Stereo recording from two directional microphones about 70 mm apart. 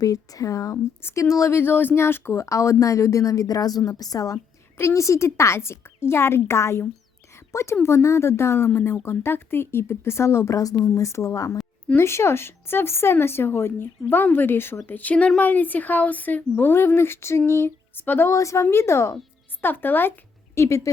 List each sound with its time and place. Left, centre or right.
0.0 s a woman's voice: left
4.8 s speech: left
10.8 s a woman's voice: left
18.3 s a woman's voice: left
19.6 s speech: left
20.6 s a woman's voice: left